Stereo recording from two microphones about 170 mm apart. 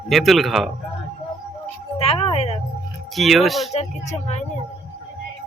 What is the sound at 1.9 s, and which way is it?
Speech, 35° left (ahead or behind).